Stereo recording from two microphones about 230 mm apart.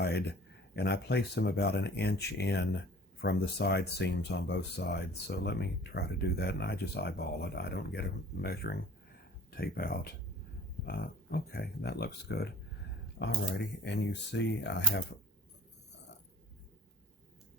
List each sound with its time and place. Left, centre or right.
0.0 s a sound: left
0.8 s speech: left
13.2 s speech: left